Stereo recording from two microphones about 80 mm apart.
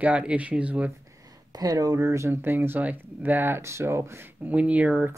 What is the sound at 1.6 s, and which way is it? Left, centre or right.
Speech, right.